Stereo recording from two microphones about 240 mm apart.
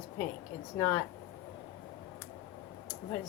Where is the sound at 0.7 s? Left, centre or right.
Centre.